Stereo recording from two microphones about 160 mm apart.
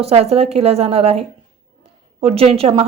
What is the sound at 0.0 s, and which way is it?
A woman's voice, 40° right (ahead or behind).